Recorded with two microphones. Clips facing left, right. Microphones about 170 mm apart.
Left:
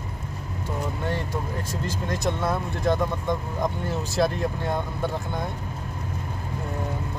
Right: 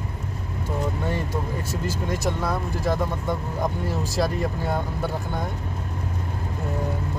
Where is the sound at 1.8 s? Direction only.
5° right (ahead or behind).